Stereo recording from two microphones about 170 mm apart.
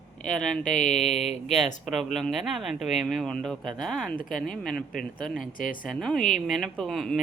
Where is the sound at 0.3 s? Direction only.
5° left (ahead or behind).